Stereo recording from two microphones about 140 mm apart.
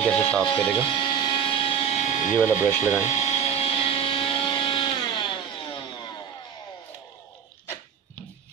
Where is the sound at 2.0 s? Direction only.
60° left (ahead or behind); by 6.2 s 35° left (ahead or behind).